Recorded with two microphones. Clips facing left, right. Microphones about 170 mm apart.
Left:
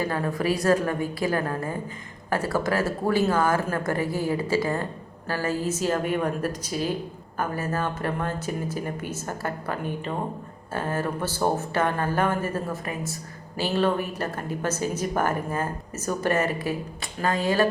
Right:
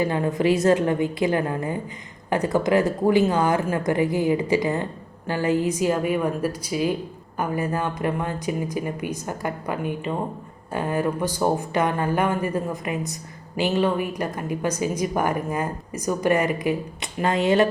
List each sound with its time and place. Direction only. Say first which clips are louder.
0.0 s a woman's voice: right 4 dB; 20° right (ahead or behind)